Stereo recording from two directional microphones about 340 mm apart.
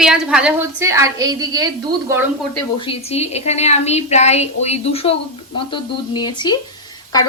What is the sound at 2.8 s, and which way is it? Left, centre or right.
A woman's voice, centre.